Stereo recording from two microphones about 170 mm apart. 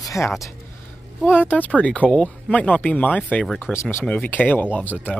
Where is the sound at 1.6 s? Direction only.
10° left (ahead or behind).